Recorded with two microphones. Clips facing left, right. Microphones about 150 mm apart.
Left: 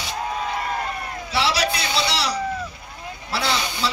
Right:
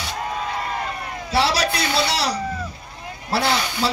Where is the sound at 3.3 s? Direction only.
45° right (ahead or behind).